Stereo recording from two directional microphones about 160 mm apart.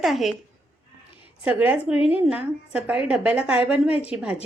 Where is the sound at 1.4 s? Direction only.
10° right (ahead or behind).